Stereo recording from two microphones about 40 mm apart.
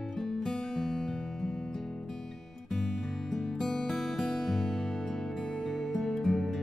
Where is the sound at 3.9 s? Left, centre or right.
Centre.